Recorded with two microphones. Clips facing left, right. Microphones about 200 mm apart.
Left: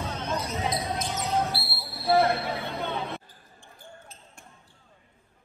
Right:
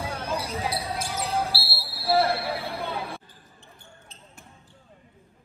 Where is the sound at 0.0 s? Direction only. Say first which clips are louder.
Right 1 dB; 30° right (ahead or behind).